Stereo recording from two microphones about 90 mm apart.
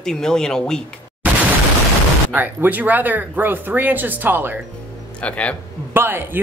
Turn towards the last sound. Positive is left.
turn(degrees=-25)  # may be behind; listen again after turning